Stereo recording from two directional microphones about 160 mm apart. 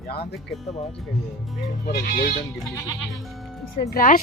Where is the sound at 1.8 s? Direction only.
80° left.